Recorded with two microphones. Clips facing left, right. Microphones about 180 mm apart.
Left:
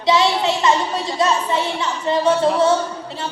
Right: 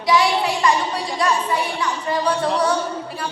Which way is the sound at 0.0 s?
25° left (ahead or behind).